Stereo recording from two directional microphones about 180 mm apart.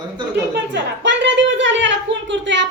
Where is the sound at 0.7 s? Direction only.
80° right.